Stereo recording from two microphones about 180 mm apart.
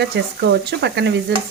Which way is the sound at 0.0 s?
70° right (ahead or behind).